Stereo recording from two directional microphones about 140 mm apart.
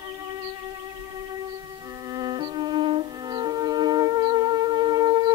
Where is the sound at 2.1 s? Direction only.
30° right (ahead or behind).